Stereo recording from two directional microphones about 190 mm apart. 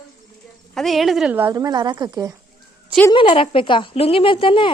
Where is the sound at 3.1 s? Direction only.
25° left (ahead or behind).